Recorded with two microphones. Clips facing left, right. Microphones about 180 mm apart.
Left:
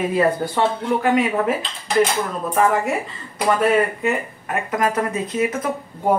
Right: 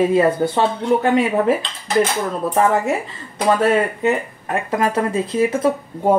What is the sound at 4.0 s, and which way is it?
Speech, 25° right (ahead or behind).